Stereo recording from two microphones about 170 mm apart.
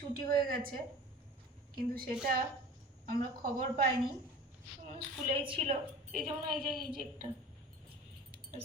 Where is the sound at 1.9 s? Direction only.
60° right (ahead or behind).